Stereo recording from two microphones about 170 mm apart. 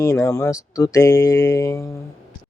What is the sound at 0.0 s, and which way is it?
Speech, 15° left (ahead or behind).